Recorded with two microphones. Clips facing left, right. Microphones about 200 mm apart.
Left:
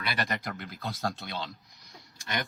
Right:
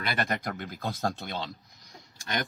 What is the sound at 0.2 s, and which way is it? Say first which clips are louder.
Speech: right 3 dB; 50° right (ahead or behind).